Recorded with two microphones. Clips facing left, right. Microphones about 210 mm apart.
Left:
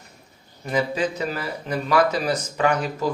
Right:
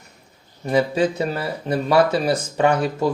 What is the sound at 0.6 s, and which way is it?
Speech, 30° right (ahead or behind).